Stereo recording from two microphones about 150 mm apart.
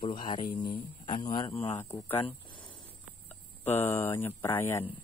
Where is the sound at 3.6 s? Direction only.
15° left (ahead or behind).